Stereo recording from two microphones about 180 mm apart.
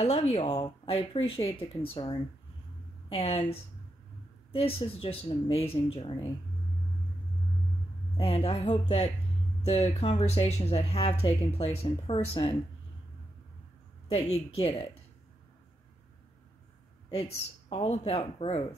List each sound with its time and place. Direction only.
0.0 s speech: 35° left (ahead or behind)
8.2 s speech: 30° left (ahead or behind)
14.0 s speech: 35° left (ahead or behind)
17.1 s speech: 35° left (ahead or behind)